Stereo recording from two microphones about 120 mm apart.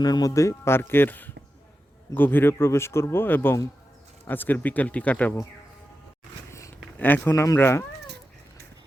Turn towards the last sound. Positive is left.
turn(degrees=20)  # may be behind; listen again after turning